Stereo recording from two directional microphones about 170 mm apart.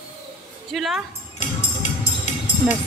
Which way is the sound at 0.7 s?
Centre (ahead or behind).